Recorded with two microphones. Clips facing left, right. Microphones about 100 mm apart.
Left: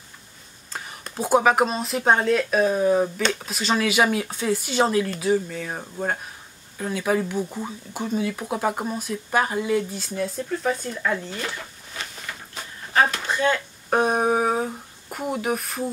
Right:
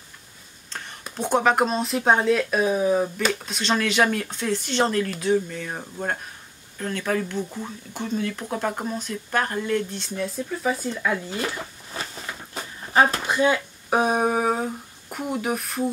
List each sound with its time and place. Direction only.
0.7 s whispering: 5° left (ahead or behind)
1.1 s speech: 5° left (ahead or behind)
11.3 s a sound: 30° right (ahead or behind)
13.3 s speech: 10° right (ahead or behind)